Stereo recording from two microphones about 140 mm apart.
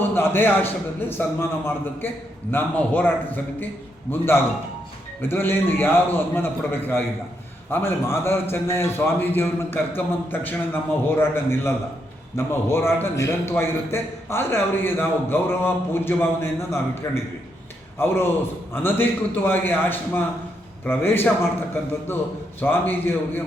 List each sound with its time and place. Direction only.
0.0 s a man's voice: 15° left (ahead or behind)
22.6 s a man's voice: 15° left (ahead or behind)